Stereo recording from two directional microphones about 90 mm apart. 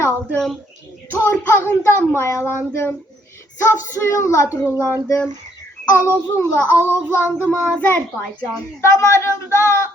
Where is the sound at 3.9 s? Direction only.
35° left (ahead or behind).